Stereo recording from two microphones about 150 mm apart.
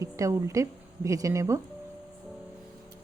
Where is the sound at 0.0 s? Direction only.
20° right (ahead or behind).